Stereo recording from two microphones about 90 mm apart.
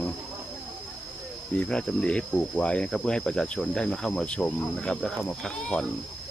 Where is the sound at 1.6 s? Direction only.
10° left (ahead or behind).